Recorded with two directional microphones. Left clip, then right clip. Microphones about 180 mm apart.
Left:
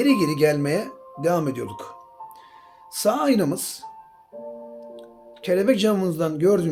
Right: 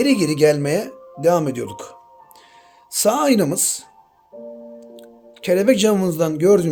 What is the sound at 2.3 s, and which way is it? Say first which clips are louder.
Music: left 1 dB; 35° right (ahead or behind).